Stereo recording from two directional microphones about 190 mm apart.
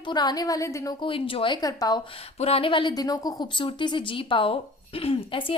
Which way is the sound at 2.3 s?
30° left (ahead or behind).